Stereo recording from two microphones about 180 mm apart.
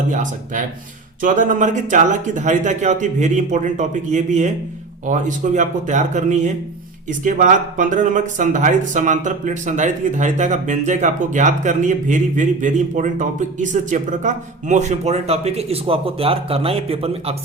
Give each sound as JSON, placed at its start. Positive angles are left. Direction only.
{"t": 0.1, "sound": "speech", "side_deg": -45}